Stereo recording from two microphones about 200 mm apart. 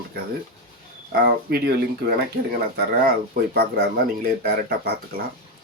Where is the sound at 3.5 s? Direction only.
50° right (ahead or behind).